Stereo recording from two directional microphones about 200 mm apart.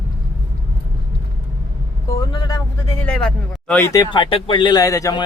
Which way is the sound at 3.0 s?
5° left (ahead or behind).